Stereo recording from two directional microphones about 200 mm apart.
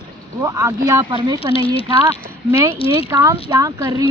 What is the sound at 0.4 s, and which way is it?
Speech, 15° right (ahead or behind).